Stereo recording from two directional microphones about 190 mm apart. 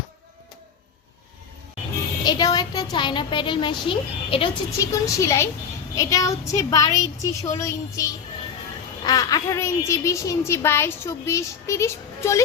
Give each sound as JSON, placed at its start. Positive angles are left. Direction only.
{"t": 2.2, "sound": "a woman's voice", "side_deg": 20}
{"t": 4.8, "sound": "a woman's voice", "side_deg": 15}